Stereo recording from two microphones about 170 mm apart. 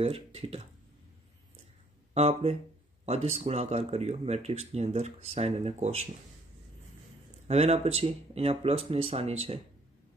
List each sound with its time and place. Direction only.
0.0 s speech: 35° right (ahead or behind)
2.1 s speech: 40° right (ahead or behind)
7.4 s speech: 40° right (ahead or behind)